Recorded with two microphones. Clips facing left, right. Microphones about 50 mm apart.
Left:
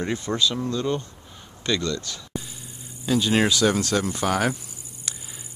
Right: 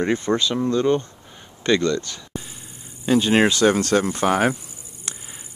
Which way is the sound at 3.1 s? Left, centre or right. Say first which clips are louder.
Right 4 dB; right.